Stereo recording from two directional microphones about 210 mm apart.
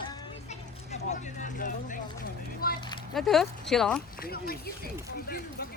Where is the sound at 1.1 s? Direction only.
35° left (ahead or behind).